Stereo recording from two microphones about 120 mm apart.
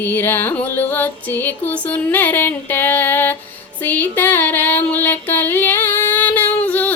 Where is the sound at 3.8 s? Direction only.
15° left (ahead or behind).